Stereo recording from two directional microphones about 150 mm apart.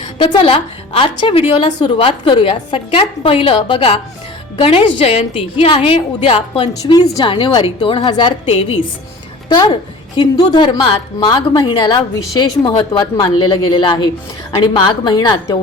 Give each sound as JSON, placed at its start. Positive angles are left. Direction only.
{"t": 0.3, "sound": "a woman's voice", "side_deg": 40}